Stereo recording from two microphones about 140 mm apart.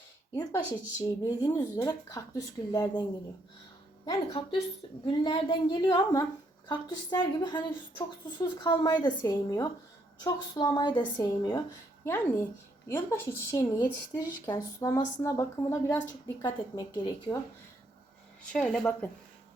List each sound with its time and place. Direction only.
0.3 s a woman's voice: 30° left (ahead or behind)
12.0 s a woman's voice: 15° left (ahead or behind); by 17.3 s 30° left (ahead or behind)
18.5 s speech: 5° left (ahead or behind)